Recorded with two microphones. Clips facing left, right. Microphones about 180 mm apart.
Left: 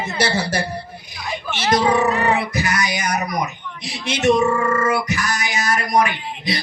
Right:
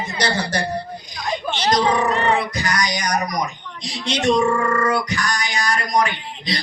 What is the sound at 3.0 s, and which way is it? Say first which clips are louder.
A man's voice: even; 25° left (ahead or behind).